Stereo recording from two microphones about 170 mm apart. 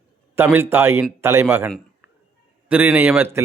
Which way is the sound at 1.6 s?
5° right (ahead or behind).